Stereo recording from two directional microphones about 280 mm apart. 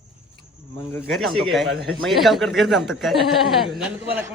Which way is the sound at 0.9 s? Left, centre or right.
Centre.